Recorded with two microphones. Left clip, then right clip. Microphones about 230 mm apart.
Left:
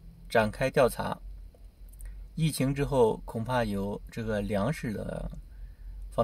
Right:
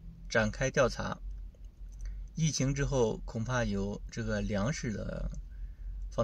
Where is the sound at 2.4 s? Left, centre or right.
Left.